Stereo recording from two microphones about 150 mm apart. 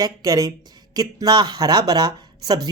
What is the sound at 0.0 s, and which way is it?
Speech, 25° right (ahead or behind).